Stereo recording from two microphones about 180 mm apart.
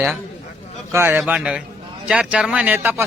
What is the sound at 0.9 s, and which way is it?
A man's voice, 10° right (ahead or behind).